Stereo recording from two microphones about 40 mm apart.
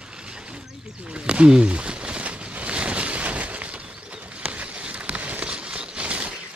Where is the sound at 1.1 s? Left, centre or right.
Right.